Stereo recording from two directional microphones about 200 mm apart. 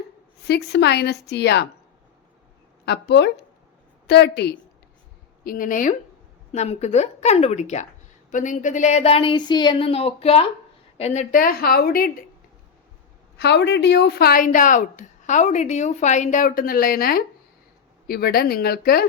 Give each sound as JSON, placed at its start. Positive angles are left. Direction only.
{"t": 0.4, "sound": "speech", "side_deg": 55}
{"t": 2.8, "sound": "speech", "side_deg": 55}
{"t": 5.4, "sound": "a woman's voice", "side_deg": 45}
{"t": 13.4, "sound": "a woman's voice", "side_deg": 55}